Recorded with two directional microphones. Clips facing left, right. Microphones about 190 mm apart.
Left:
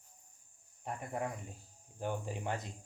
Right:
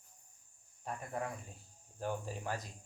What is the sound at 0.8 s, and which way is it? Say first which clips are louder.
Speech: left 2 dB; 20° left (ahead or behind).